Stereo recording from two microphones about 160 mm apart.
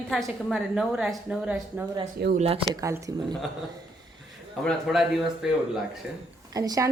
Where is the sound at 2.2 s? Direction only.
90° right.